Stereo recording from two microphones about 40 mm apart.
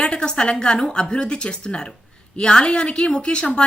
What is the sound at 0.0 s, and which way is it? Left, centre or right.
A woman's voice, left.